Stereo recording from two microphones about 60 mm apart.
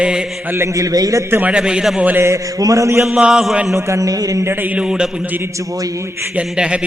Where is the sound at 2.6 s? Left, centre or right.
Right.